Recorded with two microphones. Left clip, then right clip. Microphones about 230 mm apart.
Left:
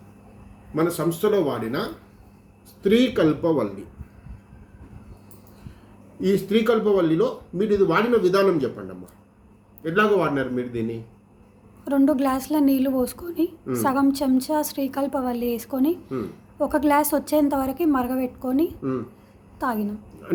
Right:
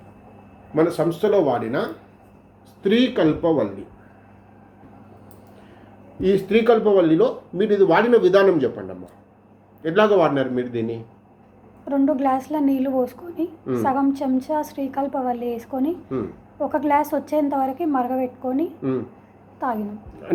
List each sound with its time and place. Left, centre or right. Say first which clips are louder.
0.8 s a man's voice: right 3 dB; centre
6.1 s a man's voice: right 3 dB; centre
9.8 s a man's voice: right 4 dB; centre
11.9 s a woman's voice: right 1 dB; left